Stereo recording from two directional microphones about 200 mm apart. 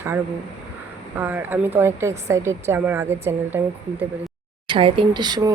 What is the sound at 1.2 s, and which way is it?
A woman's voice, 10° right (ahead or behind).